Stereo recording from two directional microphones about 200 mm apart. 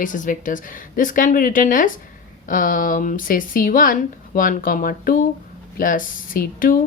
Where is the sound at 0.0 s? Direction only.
40° left (ahead or behind).